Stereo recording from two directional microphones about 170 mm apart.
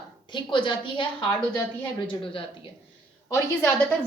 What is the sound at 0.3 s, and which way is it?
Speech, 30° left (ahead or behind).